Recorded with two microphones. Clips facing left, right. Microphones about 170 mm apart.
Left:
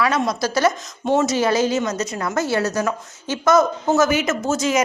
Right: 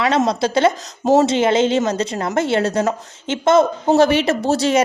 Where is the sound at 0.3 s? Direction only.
25° right (ahead or behind).